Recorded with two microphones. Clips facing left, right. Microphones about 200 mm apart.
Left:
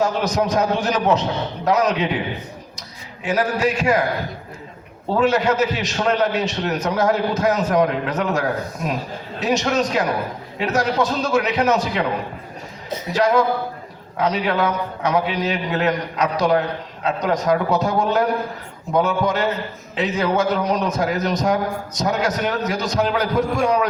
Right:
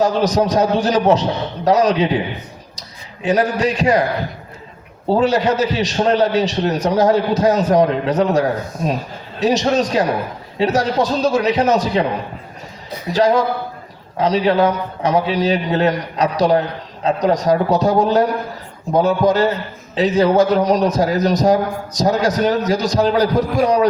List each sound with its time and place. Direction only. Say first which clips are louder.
0.0 s a man's voice: right 4 dB; 35° right (ahead or behind)
3.2 s a man's voice: right 3 dB; 35° right (ahead or behind)
5.0 s a man's voice: right 3 dB; 35° right (ahead or behind)
13.1 s a man's voice: right 2 dB; 35° right (ahead or behind)